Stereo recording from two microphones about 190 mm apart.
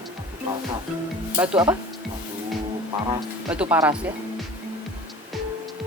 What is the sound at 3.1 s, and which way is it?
Speech, 5° right (ahead or behind).